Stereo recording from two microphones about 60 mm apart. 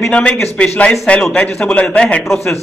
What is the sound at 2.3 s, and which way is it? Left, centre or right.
Speech, left.